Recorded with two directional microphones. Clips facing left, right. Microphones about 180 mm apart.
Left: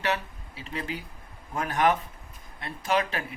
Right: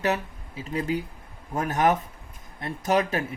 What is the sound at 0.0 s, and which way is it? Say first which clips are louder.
Speech: right 3 dB; 40° right (ahead or behind).